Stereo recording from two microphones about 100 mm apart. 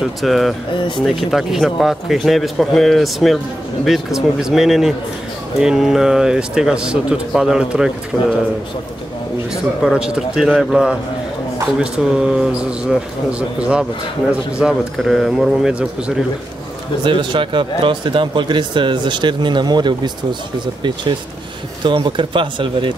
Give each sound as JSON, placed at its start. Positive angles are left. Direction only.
{"t": 0.0, "sound": "a man's voice", "side_deg": 0}
{"t": 0.7, "sound": "speech", "side_deg": 50}
{"t": 1.0, "sound": "a man's voice", "side_deg": 0}
{"t": 8.1, "sound": "speech", "side_deg": 10}
{"t": 9.9, "sound": "a man's voice", "side_deg": -5}
{"t": 17.0, "sound": "speech", "side_deg": -50}